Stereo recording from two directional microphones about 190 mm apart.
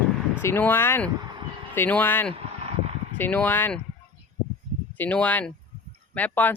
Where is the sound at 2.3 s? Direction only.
30° right (ahead or behind).